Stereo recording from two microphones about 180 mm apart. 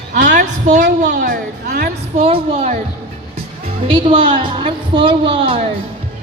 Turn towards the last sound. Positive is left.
turn(degrees=-30)  # may be behind; listen again after turning